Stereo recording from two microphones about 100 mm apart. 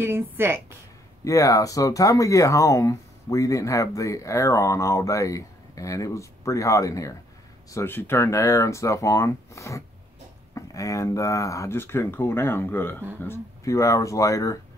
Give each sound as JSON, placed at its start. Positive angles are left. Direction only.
{"t": 0.0, "sound": "a woman's voice", "side_deg": -25}
{"t": 1.2, "sound": "speech", "side_deg": 35}
{"t": 7.7, "sound": "speech", "side_deg": 20}